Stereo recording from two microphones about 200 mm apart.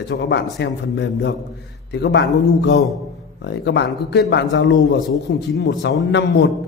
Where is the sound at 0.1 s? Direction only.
55° left (ahead or behind).